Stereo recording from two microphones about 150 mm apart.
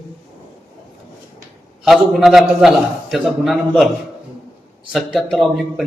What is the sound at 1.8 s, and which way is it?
A man's voice, centre (ahead or behind).